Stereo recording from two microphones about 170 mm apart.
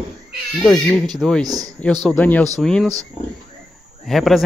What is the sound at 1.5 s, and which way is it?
Speech, 20° right (ahead or behind).